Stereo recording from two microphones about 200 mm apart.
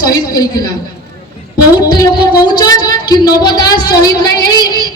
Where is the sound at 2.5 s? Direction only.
20° left (ahead or behind).